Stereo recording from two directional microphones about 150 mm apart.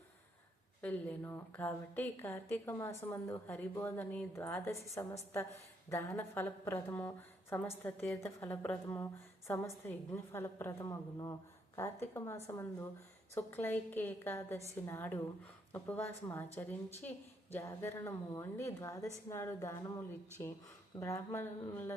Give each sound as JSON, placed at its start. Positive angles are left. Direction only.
{"t": 0.8, "sound": "a woman's voice", "side_deg": 10}